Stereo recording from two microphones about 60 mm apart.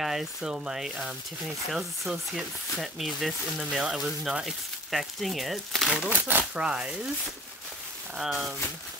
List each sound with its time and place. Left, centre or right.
0.0 s speech: centre
6.0 s speech: right
6.5 s speech: centre
8.2 s speech: centre